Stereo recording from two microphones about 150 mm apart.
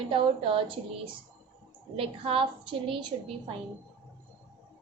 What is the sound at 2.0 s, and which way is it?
A woman's voice, 35° right (ahead or behind).